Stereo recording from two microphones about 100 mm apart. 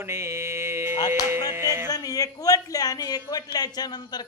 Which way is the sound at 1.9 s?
35° left (ahead or behind).